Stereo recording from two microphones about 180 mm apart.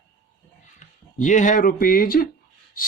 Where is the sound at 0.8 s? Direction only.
45° left (ahead or behind).